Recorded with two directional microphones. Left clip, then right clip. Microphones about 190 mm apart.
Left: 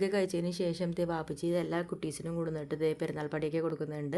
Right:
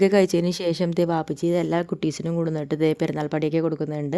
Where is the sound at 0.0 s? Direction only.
45° right (ahead or behind).